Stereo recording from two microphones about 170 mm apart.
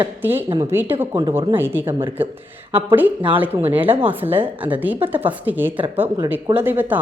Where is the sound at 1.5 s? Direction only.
10° right (ahead or behind).